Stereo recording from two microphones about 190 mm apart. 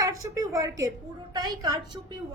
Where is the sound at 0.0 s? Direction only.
15° right (ahead or behind).